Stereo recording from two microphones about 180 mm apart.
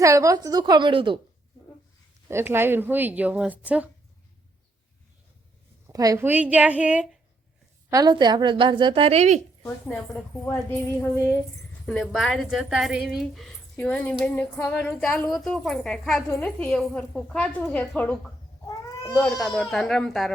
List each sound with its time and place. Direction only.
0.0 s a woman's voice: 20° right (ahead or behind)
2.3 s a woman's voice: 10° right (ahead or behind)
5.9 s a woman's voice: 20° right (ahead or behind)
7.9 s a woman's voice: 20° right (ahead or behind); by 9.4 s 40° right (ahead or behind)
10.1 s a woman's voice: 10° left (ahead or behind)
11.9 s speech: centre (ahead or behind)